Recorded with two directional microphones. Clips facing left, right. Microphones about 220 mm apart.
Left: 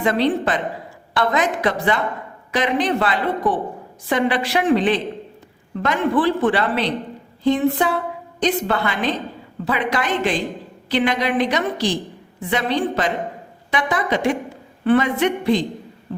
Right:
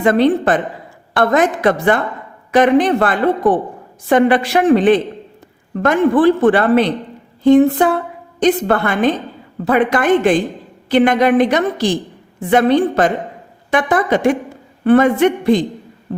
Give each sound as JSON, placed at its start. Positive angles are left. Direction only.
{"t": 0.0, "sound": "a man's voice", "side_deg": -50}